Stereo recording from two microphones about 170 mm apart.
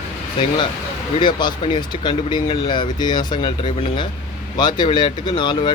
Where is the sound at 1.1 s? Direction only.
25° left (ahead or behind).